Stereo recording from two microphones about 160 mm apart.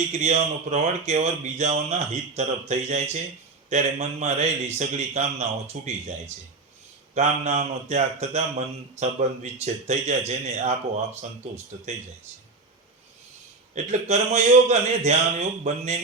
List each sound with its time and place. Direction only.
0.1 s a man's voice: 45° right (ahead or behind)
13.7 s a man's voice: 45° right (ahead or behind)